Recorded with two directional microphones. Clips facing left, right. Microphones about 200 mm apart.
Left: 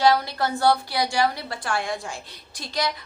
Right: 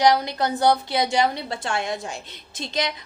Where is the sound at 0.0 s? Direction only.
20° right (ahead or behind).